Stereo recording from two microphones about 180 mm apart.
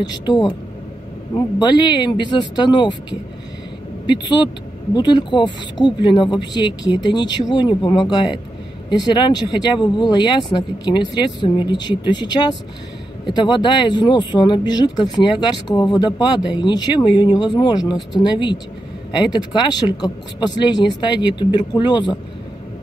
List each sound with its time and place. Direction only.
0.0 s speech: 20° left (ahead or behind)